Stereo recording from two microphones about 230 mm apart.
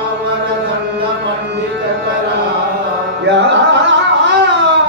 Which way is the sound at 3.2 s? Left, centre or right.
Right.